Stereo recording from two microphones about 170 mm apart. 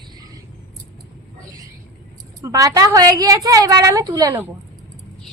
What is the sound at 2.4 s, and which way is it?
A woman's voice, 20° right (ahead or behind).